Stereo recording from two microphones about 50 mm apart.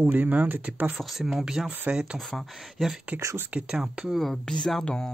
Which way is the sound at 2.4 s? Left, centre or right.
Centre.